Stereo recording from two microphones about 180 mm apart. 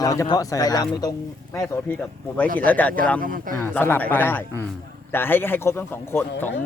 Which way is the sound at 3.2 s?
50° right (ahead or behind).